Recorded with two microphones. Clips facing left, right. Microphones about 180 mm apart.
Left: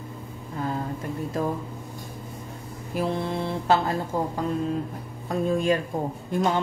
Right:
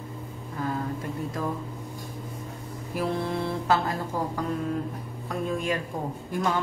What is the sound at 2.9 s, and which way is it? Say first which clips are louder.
Mantra: left 1 dB; 25° left (ahead or behind).